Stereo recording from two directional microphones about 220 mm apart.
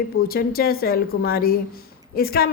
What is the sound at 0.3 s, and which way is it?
A woman's voice, 40° left (ahead or behind).